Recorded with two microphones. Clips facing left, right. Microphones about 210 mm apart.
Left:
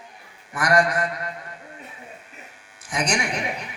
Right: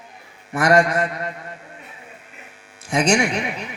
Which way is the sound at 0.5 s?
25° right (ahead or behind).